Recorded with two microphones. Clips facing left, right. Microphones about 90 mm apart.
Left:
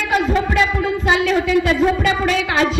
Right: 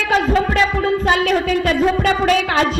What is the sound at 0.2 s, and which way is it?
A woman's voice, 45° right (ahead or behind).